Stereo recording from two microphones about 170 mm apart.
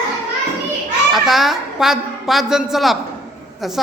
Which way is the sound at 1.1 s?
Centre (ahead or behind).